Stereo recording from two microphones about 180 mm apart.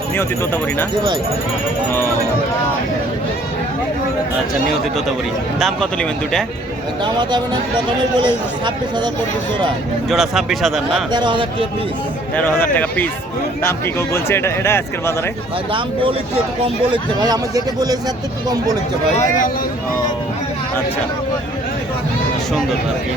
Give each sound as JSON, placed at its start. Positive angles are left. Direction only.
{"t": 0.2, "sound": "speech", "side_deg": 10}
{"t": 5.5, "sound": "speech", "side_deg": 5}
{"t": 7.0, "sound": "a man's voice", "side_deg": -25}
{"t": 10.1, "sound": "speech", "side_deg": 0}
{"t": 11.1, "sound": "a man's voice", "side_deg": -25}
{"t": 12.4, "sound": "speech", "side_deg": 10}
{"t": 16.6, "sound": "a man's voice", "side_deg": -25}
{"t": 19.1, "sound": "speech", "side_deg": 45}